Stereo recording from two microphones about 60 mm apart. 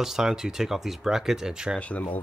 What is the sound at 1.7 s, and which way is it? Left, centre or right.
Speech, left.